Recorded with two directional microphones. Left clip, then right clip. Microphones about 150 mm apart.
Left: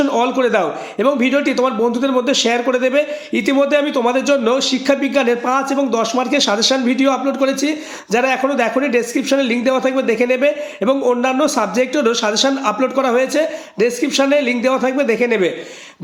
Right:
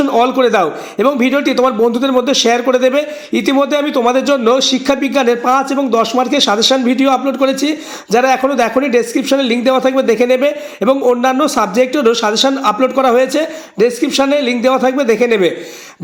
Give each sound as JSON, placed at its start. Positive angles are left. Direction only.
{"t": 0.0, "sound": "a man's voice", "side_deg": -20}